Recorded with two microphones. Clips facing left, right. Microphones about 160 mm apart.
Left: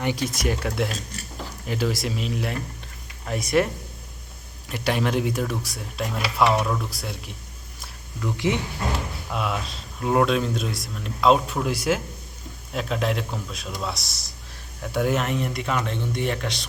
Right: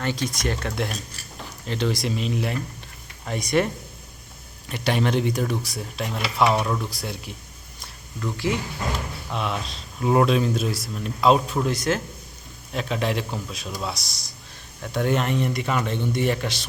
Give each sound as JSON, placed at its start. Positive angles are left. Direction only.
{"t": 0.0, "sound": "speech", "side_deg": 10}
{"t": 4.7, "sound": "speech", "side_deg": 0}
{"t": 8.4, "sound": "speech", "side_deg": 20}
{"t": 9.3, "sound": "speech", "side_deg": 5}